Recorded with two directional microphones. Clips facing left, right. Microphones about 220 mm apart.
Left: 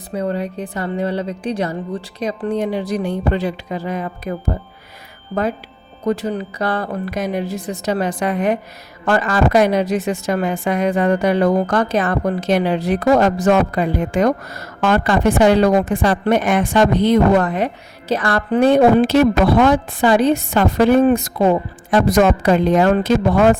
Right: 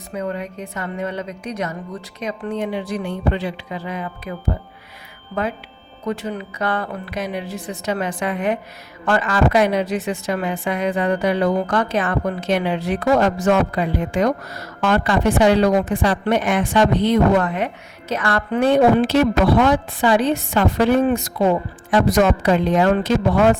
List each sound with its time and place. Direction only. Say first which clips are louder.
0.1 s a woman's voice: left 4 dB; 35° left (ahead or behind)